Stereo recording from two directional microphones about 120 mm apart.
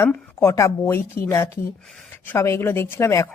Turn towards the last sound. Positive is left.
turn(degrees=25)  # may be behind; listen again after turning